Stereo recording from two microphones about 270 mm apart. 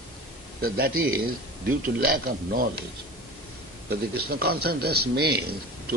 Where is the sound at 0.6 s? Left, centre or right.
Right.